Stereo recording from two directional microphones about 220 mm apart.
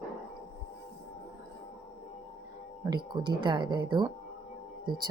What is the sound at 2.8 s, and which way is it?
Speech, 20° right (ahead or behind).